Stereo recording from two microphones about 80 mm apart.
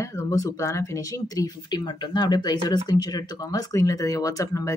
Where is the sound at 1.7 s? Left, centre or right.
Left.